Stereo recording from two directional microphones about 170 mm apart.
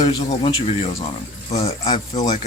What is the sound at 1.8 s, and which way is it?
Speech, 25° left (ahead or behind).